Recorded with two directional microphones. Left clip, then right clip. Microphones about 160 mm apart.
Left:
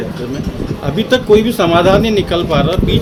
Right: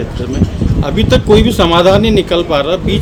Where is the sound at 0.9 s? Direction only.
40° right (ahead or behind).